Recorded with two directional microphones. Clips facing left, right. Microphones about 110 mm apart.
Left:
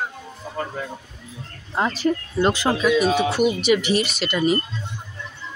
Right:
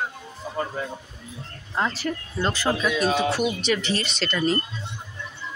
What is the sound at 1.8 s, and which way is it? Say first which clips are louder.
Speech: left 5 dB; 20° left (ahead or behind).